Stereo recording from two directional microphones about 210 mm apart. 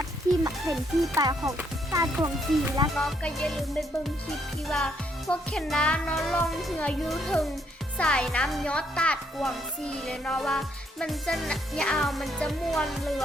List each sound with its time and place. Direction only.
1.1 s a child's voice: 15° right (ahead or behind)
2.9 s speech: centre (ahead or behind)